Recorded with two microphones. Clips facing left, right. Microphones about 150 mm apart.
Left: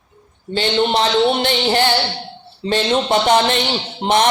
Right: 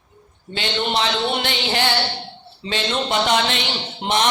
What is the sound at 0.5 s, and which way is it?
Speech, 35° left (ahead or behind).